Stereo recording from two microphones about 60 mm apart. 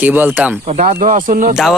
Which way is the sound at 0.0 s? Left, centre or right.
Right.